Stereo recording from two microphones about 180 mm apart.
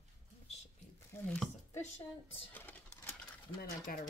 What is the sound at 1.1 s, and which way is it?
Speech, 10° left (ahead or behind).